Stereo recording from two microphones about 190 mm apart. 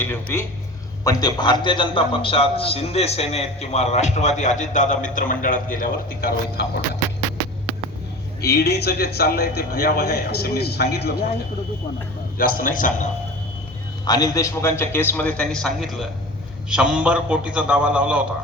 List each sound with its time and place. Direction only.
0.0 s a man's voice: 10° left (ahead or behind); by 6.7 s 55° left (ahead or behind)
8.4 s a man's voice: 60° left (ahead or behind)
12.4 s a man's voice: 50° left (ahead or behind)
14.0 s a man's voice: 20° left (ahead or behind); by 18.2 s 5° right (ahead or behind)